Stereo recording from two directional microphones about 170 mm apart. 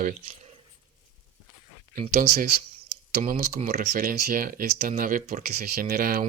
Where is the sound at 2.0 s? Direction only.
45° right (ahead or behind).